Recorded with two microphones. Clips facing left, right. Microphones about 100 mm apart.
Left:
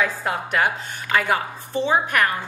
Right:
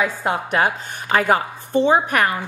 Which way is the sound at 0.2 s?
30° right (ahead or behind).